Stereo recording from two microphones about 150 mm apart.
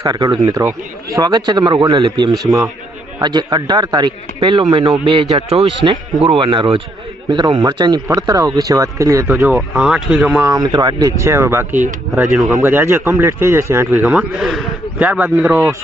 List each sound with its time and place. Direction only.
0.0 s a man's voice: 25° right (ahead or behind)
9.3 s a man's voice: 5° right (ahead or behind)
10.4 s a man's voice: 25° right (ahead or behind)
14.0 s a man's voice: 5° right (ahead or behind)